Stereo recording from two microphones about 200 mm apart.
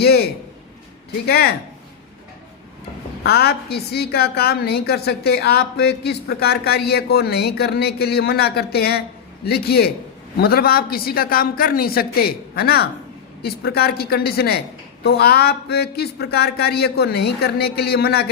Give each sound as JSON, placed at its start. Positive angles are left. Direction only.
{"t": 0.0, "sound": "a man's voice", "side_deg": 50}
{"t": 1.3, "sound": "a woman's voice", "side_deg": 50}
{"t": 3.2, "sound": "a woman's voice", "side_deg": 50}